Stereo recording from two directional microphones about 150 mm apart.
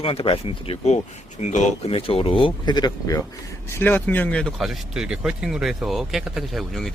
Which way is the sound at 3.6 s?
15° left (ahead or behind).